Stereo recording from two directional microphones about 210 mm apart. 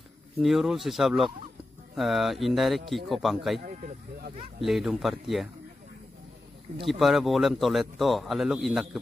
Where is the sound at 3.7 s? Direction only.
40° right (ahead or behind).